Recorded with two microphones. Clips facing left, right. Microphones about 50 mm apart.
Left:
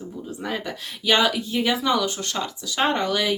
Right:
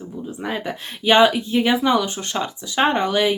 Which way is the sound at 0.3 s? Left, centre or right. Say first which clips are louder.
Right 3 dB; right.